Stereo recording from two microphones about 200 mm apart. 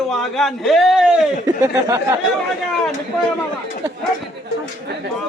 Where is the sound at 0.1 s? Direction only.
Centre (ahead or behind).